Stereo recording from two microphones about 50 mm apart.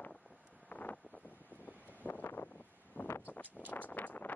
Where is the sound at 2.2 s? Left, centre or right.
Left.